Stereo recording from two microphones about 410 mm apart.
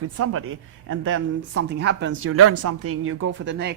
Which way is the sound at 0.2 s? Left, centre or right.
Right.